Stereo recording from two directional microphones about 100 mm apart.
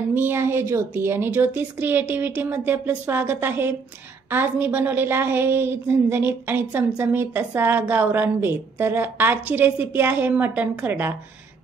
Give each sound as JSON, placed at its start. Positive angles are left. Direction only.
{"t": 0.1, "sound": "a woman's voice", "side_deg": -20}